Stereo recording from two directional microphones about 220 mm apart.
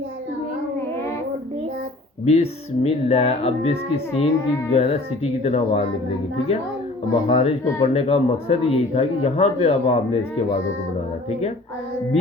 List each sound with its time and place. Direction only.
2.2 s speech: 30° left (ahead or behind)
7.3 s speech: 30° left (ahead or behind)